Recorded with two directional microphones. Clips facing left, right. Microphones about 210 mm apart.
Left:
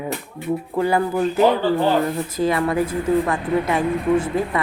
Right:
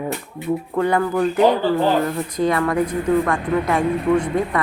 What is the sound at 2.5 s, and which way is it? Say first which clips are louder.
Speech: even; 25° left (ahead or behind).